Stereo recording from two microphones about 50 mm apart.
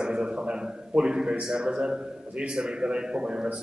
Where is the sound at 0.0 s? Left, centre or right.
Centre.